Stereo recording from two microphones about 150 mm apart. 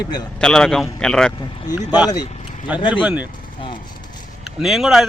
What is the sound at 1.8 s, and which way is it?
Speech, 10° right (ahead or behind).